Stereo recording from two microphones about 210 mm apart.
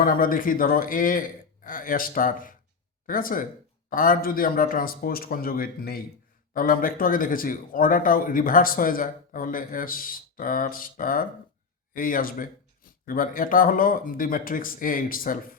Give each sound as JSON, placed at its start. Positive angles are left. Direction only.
{"t": 0.0, "sound": "speech", "side_deg": 40}